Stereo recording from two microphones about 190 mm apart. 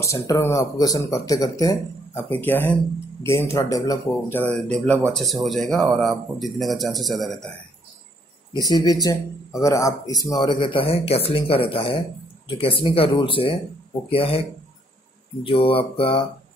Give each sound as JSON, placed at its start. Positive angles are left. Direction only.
{"t": 0.0, "sound": "speech", "side_deg": 15}
{"t": 8.5, "sound": "speech", "side_deg": 20}
{"t": 15.4, "sound": "speech", "side_deg": 30}